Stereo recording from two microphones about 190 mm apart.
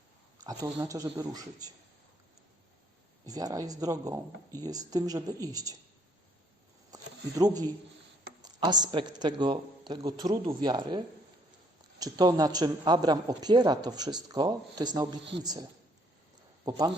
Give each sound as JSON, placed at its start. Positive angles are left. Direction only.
{"t": 0.4, "sound": "speech", "side_deg": -15}
{"t": 3.2, "sound": "speech", "side_deg": -20}
{"t": 6.9, "sound": "speech", "side_deg": -20}
{"t": 16.6, "sound": "speech", "side_deg": -20}